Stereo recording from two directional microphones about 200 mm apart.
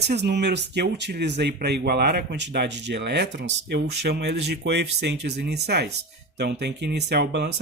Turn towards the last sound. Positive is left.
turn(degrees=-55)  # may be behind; listen again after turning